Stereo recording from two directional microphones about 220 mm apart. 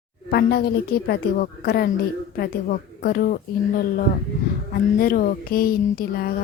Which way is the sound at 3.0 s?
45° left (ahead or behind).